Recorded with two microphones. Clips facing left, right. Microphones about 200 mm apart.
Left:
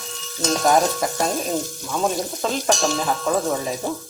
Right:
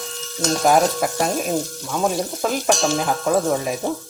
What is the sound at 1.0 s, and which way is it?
Speech, 10° right (ahead or behind).